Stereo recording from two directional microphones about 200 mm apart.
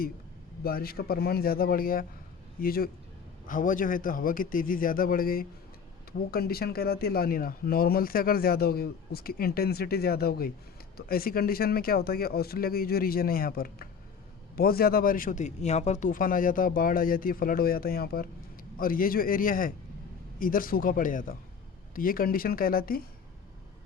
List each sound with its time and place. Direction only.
0.6 s speech: 50° left (ahead or behind)